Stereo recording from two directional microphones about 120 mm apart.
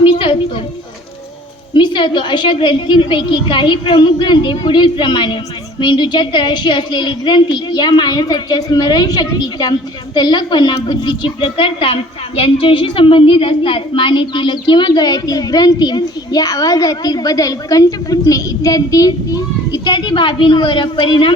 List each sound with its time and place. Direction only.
0.0 s children playing: 50° left (ahead or behind)
1.7 s a woman's voice: 40° left (ahead or behind)